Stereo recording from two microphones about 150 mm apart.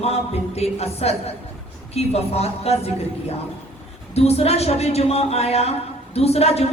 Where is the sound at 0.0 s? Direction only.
45° left (ahead or behind).